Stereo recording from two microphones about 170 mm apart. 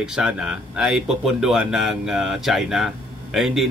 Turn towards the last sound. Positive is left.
turn(degrees=0)  # may be behind; listen again after turning